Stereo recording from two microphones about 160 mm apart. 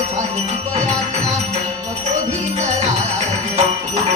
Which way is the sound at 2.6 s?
45° right (ahead or behind).